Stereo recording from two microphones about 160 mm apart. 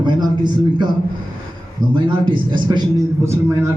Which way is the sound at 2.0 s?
30° right (ahead or behind).